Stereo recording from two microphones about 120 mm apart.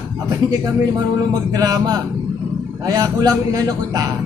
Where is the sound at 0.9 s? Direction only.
30° right (ahead or behind).